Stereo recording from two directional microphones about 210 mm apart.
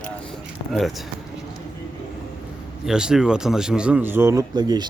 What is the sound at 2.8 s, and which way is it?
Speech, 5° right (ahead or behind).